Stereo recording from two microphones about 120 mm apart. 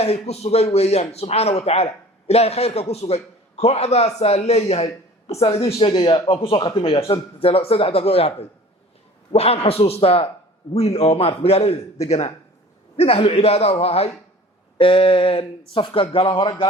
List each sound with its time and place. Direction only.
0.0 s a man's voice: 60° left (ahead or behind); by 16.6 s 45° left (ahead or behind)